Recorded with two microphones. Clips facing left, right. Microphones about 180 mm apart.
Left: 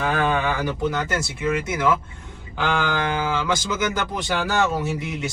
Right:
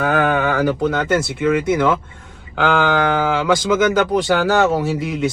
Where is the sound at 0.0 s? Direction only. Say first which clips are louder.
Right 5 dB; 65° right (ahead or behind).